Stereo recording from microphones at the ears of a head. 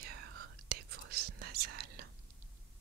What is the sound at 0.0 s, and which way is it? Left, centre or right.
Whispering, right.